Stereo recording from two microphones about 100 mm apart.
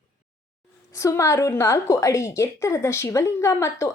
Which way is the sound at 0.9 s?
30° left (ahead or behind).